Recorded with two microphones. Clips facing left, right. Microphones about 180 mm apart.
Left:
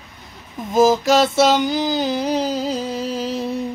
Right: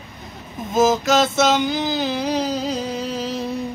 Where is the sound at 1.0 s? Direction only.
35° left (ahead or behind).